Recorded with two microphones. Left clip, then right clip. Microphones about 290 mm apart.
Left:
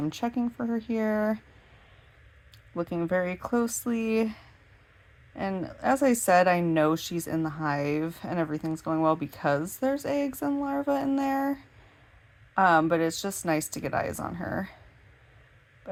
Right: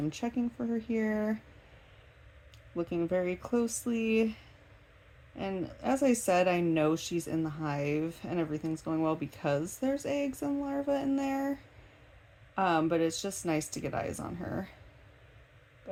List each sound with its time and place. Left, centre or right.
0.0 s a woman's voice: left
2.7 s a woman's voice: left